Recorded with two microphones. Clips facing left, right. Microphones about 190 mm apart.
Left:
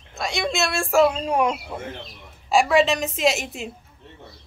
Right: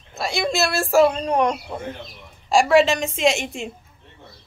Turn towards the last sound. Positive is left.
turn(degrees=5)  # may be behind; listen again after turning